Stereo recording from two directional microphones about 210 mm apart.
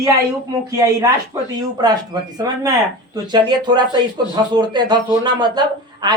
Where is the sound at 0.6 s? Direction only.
15° right (ahead or behind).